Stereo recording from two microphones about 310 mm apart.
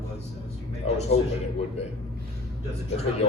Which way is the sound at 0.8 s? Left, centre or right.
Left.